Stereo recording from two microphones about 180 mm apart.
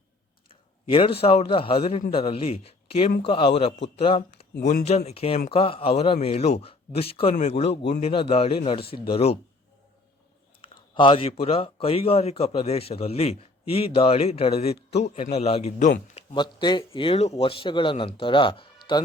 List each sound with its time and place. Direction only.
0.9 s a man's voice: 30° left (ahead or behind)
10.9 s a man's voice: 30° left (ahead or behind)
16.3 s speech: 25° left (ahead or behind)